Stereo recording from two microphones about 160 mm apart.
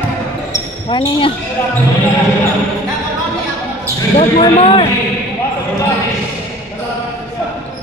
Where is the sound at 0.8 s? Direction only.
30° left (ahead or behind).